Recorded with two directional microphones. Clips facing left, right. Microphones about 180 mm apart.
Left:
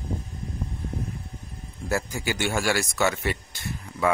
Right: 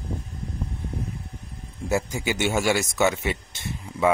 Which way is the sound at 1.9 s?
20° right (ahead or behind).